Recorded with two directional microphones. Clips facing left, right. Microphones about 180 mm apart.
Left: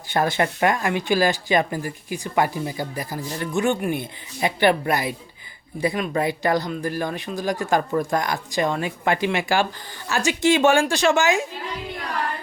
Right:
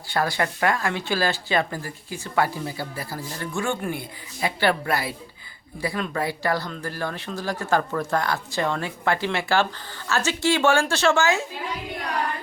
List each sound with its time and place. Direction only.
0.1 s speech: 20° left (ahead or behind)